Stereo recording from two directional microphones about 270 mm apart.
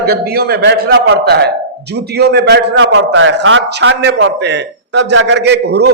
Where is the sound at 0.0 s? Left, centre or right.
Right.